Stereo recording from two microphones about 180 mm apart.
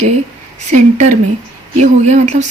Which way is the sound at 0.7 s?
40° right (ahead or behind).